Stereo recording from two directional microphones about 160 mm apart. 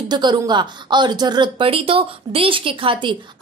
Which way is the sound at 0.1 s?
25° right (ahead or behind).